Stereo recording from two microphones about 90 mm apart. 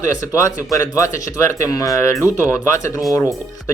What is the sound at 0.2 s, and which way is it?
Speech, 35° left (ahead or behind).